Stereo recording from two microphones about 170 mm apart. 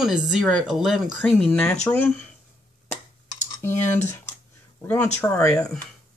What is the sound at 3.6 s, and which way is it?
Speech, 15° left (ahead or behind).